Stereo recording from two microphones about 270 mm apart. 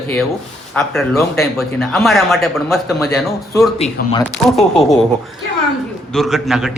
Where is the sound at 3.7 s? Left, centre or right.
Left.